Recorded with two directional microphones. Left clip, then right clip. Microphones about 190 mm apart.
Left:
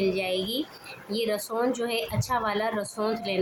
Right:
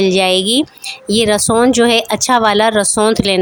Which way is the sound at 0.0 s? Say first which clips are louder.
Right 15 dB; 60° right (ahead or behind).